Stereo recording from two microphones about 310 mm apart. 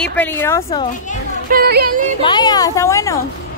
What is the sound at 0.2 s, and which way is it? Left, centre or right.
Speech, centre.